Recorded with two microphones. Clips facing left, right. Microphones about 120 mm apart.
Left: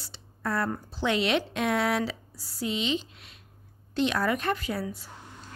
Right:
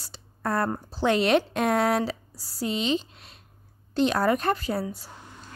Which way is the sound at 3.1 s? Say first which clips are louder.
Right 2 dB; 35° right (ahead or behind).